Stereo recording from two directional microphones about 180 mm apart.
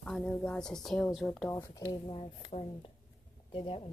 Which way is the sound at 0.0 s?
5° left (ahead or behind).